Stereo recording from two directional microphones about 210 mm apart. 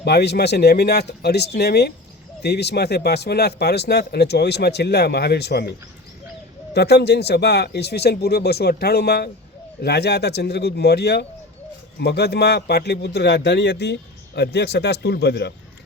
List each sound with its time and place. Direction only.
0.0 s a man's voice: 50° left (ahead or behind)
6.7 s a man's voice: 50° left (ahead or behind)